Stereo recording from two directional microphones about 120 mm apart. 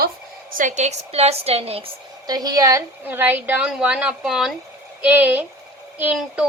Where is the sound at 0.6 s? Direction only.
85° right; by 1.8 s 55° right (ahead or behind).